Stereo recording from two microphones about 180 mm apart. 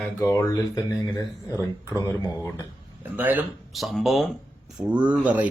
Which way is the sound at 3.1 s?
10° right (ahead or behind).